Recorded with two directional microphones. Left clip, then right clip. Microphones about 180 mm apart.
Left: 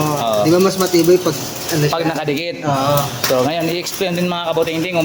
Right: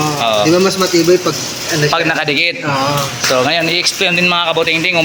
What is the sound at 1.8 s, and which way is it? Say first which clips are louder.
A man's voice: right 5 dB; 15° left (ahead or behind).